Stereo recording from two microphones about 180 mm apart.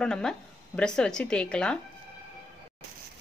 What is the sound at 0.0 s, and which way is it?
Speech, 5° left (ahead or behind).